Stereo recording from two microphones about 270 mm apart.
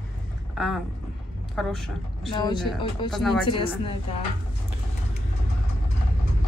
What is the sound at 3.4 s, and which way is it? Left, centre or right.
Speech, centre.